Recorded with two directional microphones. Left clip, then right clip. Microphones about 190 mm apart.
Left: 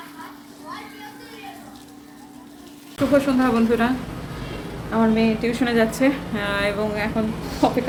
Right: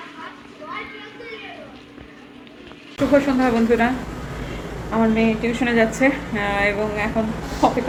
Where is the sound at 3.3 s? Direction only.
10° left (ahead or behind).